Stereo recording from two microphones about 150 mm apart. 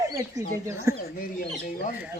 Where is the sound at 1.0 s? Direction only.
70° left (ahead or behind).